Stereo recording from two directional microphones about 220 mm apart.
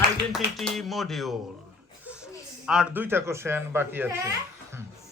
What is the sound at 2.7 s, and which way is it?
Speech, 5° right (ahead or behind).